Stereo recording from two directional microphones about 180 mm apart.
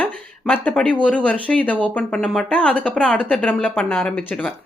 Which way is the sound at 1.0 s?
10° left (ahead or behind).